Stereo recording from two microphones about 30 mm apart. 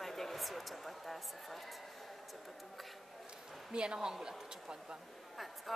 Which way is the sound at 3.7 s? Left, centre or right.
Right.